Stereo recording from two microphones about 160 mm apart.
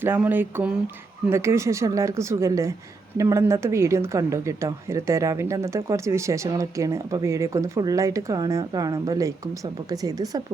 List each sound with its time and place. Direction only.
0.0 s speech: 10° right (ahead or behind)